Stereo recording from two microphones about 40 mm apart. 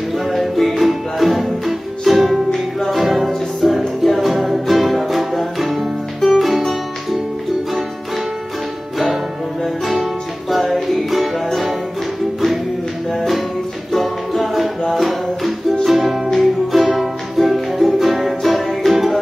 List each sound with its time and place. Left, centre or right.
0.3 s music: centre
10.5 s music: centre
13.1 s music: centre